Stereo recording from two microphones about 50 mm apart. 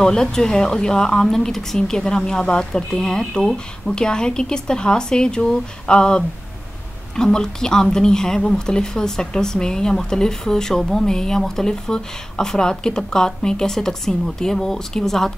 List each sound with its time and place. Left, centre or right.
0.0 s speech: centre